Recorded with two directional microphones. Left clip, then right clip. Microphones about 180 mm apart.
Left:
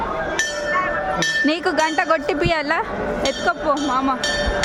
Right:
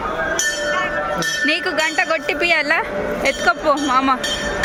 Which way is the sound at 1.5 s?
30° left (ahead or behind).